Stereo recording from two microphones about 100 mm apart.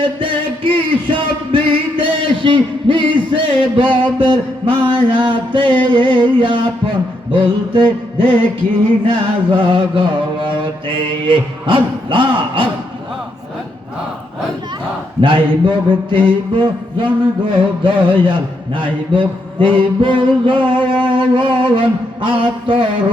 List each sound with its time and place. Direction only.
0.2 s music: 60° right (ahead or behind)
4.2 s mantra: 55° right (ahead or behind)
5.9 s a man's voice: 55° right (ahead or behind)
15.2 s a man's voice: 60° right (ahead or behind)